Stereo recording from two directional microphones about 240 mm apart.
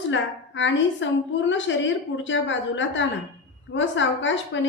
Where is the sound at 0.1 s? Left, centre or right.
Left.